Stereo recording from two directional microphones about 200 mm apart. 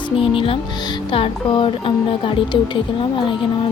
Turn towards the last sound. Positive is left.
turn(degrees=25)  # may be behind; listen again after turning